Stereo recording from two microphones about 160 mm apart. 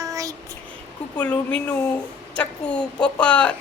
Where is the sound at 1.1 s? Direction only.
10° left (ahead or behind).